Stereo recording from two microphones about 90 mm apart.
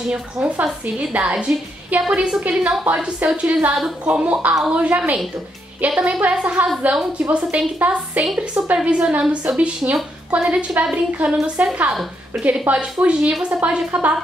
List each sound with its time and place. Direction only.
0.1 s a woman's voice: 10° right (ahead or behind)